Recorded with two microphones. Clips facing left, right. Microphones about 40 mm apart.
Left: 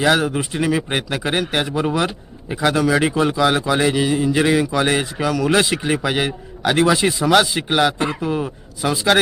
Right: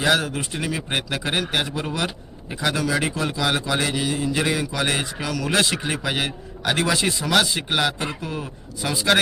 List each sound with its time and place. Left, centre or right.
0.0 s a man's voice: centre
0.9 s a man's voice: centre
2.6 s a man's voice: left; by 9.1 s centre